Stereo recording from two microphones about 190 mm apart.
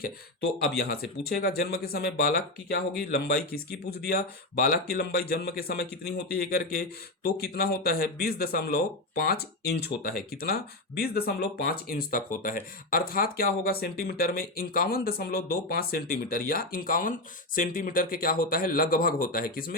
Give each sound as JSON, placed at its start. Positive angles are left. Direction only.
{"t": 0.7, "sound": "speech", "side_deg": 55}